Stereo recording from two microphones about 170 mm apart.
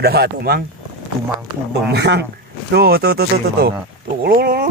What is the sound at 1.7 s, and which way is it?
Speech, 80° right.